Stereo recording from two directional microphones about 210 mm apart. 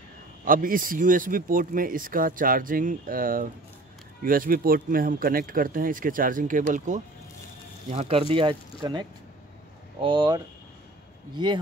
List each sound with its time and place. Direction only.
0.5 s speech: 40° right (ahead or behind); by 11.6 s 20° right (ahead or behind)